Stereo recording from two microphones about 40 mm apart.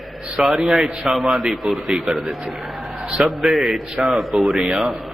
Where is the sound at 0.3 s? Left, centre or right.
Centre.